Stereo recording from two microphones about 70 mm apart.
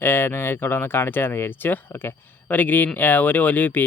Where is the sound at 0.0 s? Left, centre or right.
Left.